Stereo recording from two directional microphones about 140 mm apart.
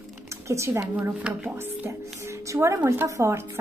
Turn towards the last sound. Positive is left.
turn(degrees=-20)  # may be behind; listen again after turning